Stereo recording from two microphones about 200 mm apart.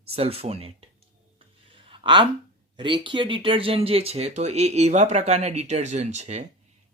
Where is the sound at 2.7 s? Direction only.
25° right (ahead or behind).